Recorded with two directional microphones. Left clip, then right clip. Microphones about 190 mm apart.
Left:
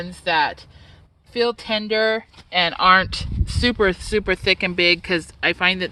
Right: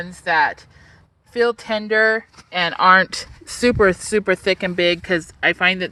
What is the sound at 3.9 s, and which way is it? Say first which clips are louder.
Speech: right 3 dB; 25° right (ahead or behind).